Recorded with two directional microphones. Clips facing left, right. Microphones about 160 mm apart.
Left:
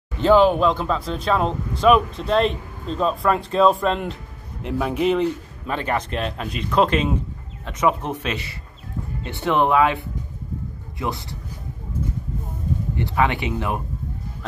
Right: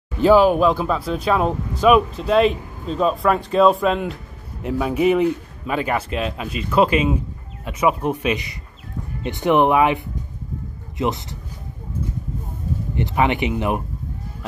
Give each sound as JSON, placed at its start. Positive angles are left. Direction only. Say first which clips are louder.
{"t": 0.2, "sound": "a man's voice", "louder": "right 2 dB", "side_deg": -10}
{"t": 12.9, "sound": "speech", "louder": "right 2 dB", "side_deg": -20}